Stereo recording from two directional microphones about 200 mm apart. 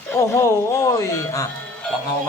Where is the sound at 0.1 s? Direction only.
15° left (ahead or behind).